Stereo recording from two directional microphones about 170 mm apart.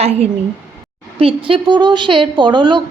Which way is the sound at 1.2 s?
30° right (ahead or behind).